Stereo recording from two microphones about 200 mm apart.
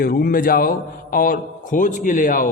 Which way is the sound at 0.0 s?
45° left (ahead or behind).